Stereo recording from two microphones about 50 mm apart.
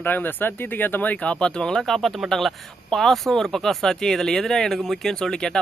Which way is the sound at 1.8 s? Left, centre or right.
Centre.